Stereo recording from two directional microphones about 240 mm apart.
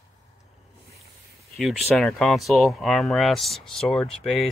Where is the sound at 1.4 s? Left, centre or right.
Centre.